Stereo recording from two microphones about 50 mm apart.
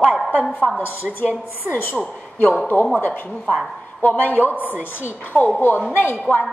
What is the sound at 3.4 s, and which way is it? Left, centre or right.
Speech, centre.